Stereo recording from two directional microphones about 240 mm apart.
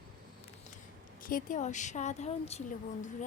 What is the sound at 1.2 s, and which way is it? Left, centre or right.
A woman's voice, left.